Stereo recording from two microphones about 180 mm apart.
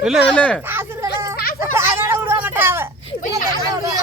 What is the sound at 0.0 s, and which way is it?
Speech, centre (ahead or behind).